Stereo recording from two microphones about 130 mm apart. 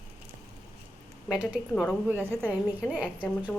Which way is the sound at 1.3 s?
5° right (ahead or behind).